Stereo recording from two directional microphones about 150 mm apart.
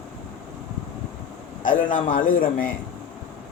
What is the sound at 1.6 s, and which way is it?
A man's voice, 65° left (ahead or behind).